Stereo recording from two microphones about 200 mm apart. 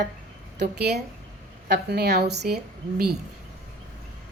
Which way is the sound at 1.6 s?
55° right (ahead or behind).